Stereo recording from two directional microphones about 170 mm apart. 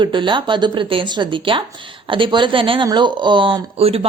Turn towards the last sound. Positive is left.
turn(degrees=-35)  # may be behind; listen again after turning